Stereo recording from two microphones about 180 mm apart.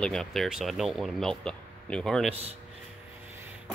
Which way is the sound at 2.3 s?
35° right (ahead or behind).